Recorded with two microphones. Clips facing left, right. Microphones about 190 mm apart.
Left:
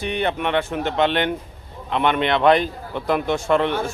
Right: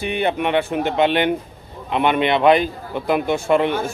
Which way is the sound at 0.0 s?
10° right (ahead or behind).